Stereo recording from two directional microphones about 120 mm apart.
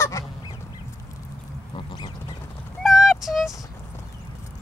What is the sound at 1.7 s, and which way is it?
Duck, 40° left (ahead or behind).